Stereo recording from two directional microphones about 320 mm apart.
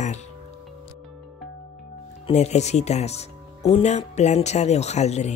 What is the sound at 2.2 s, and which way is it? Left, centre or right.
Speech, left.